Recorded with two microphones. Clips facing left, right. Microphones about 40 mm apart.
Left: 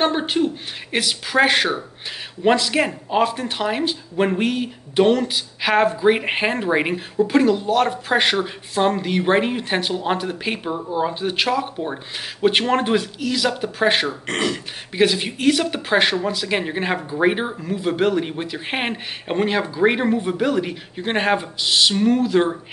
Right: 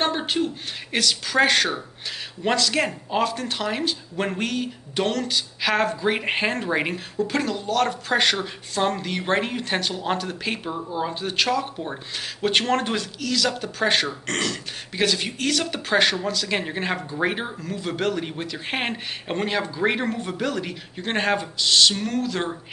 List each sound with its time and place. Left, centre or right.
0.0 s speech: centre